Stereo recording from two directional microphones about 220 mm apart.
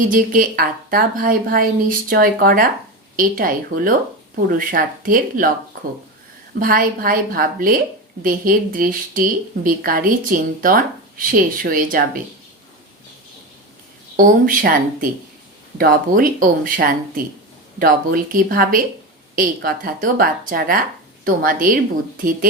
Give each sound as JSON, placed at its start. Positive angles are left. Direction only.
{"t": 0.0, "sound": "a woman's voice", "side_deg": -40}
{"t": 6.5, "sound": "a woman's voice", "side_deg": -40}
{"t": 14.2, "sound": "a woman's voice", "side_deg": -40}
{"t": 15.8, "sound": "a woman's voice", "side_deg": -40}